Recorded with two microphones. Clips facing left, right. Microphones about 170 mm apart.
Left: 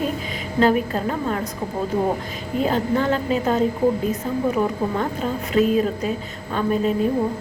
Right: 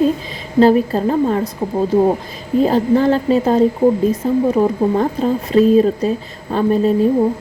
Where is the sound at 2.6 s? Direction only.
35° right (ahead or behind).